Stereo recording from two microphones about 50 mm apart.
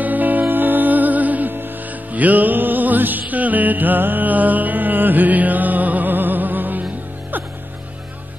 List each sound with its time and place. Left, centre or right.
0.0 s music: right